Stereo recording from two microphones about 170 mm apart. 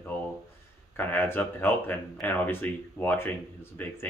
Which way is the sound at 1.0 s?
10° left (ahead or behind).